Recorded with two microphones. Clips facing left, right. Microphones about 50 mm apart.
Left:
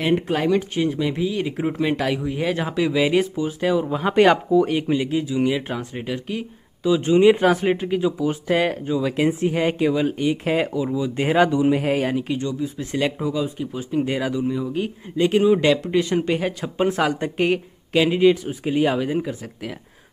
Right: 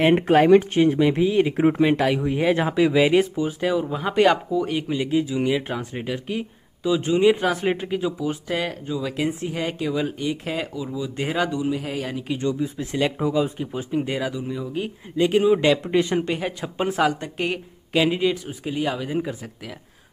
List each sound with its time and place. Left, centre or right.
0.0 s speech: right; by 5.0 s centre
5.2 s speech: centre
7.5 s speech: centre
8.5 s speech: centre
11.6 s speech: left
12.4 s speech: right
12.6 s speech: centre
13.2 s speech: centre
13.9 s speech: centre
15.8 s speech: centre
16.2 s speech: centre
17.2 s speech: centre
18.7 s speech: centre
19.0 s speech: centre